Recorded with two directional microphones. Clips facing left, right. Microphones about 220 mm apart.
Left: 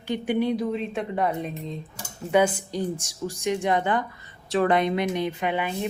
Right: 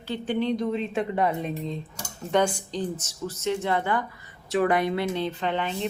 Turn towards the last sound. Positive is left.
turn(degrees=10)  # may be behind; listen again after turning